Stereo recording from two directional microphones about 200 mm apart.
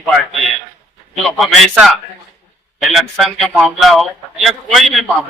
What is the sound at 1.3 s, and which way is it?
A man's voice, centre (ahead or behind).